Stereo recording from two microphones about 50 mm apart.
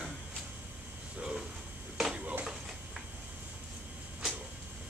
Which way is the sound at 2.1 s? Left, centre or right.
Right.